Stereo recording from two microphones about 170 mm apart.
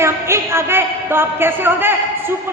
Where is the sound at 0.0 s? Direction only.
15° right (ahead or behind).